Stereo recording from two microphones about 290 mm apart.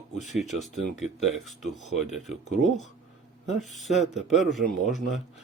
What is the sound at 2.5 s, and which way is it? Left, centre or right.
Speech, left.